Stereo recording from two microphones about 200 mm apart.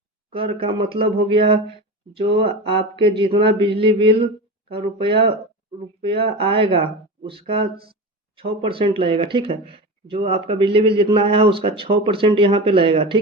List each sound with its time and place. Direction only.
0.3 s speech: 30° right (ahead or behind)